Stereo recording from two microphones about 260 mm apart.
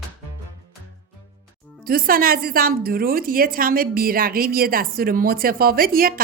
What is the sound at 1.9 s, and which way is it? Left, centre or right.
A woman's voice, right.